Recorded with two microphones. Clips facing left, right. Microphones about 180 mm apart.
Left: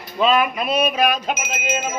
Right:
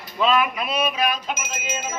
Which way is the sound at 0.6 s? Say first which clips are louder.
Left 4 dB; 45° left (ahead or behind).